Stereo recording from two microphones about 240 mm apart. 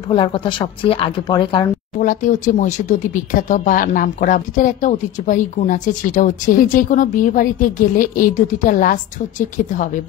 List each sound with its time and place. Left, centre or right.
0.1 s speech: left
2.0 s speech: left